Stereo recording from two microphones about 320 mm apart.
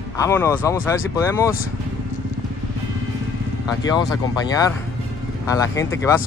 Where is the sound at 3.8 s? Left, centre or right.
Centre.